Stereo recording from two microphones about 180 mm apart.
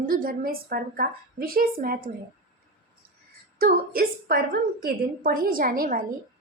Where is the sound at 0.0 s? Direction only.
50° right (ahead or behind).